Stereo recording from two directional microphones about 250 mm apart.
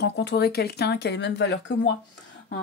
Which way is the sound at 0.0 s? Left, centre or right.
Left.